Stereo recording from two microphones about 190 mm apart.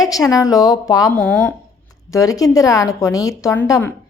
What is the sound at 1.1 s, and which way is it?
Speech, 5° left (ahead or behind).